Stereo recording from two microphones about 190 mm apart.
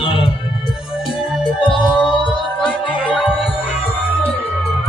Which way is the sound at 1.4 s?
25° left (ahead or behind).